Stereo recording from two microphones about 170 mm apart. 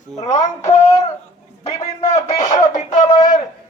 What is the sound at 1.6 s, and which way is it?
Music, 40° left (ahead or behind).